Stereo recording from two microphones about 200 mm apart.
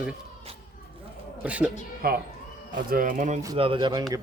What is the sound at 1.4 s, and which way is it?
Speech, 5° right (ahead or behind).